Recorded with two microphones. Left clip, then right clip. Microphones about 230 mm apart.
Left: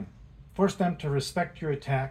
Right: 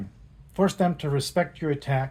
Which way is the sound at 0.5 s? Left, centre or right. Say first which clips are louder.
Right 3 dB; right.